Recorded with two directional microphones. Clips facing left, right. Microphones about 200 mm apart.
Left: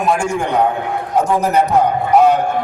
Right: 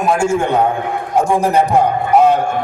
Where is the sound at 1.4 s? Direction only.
30° right (ahead or behind).